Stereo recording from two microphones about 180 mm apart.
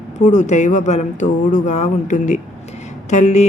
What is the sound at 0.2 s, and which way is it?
A woman's voice, 40° left (ahead or behind).